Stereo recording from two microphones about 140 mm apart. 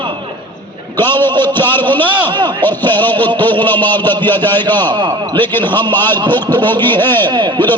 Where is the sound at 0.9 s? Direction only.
15° left (ahead or behind).